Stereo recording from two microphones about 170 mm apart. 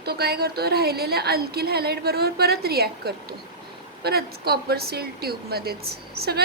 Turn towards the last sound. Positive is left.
turn(degrees=-70)  # may be behind; listen again after turning